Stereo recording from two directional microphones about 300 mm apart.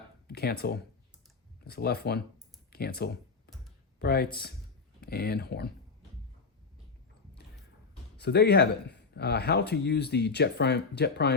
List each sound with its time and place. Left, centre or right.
0.3 s speech: left
2.7 s computer keyboard: left
4.0 s speech: left
8.2 s speech: left